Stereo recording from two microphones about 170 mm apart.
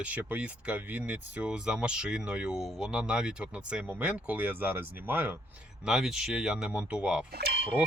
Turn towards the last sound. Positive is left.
turn(degrees=-70)  # may be behind; listen again after turning